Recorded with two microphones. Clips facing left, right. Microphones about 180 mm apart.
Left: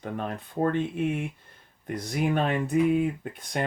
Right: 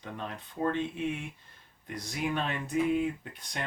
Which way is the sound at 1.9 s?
55° left (ahead or behind).